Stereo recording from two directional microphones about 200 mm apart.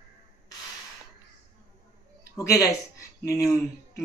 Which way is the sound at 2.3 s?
15° left (ahead or behind).